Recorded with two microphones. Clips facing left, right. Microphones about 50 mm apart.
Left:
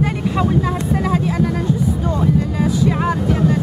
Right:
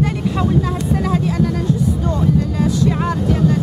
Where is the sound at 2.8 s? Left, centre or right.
Centre.